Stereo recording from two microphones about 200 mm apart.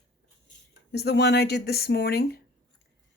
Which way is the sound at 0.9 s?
55° left (ahead or behind).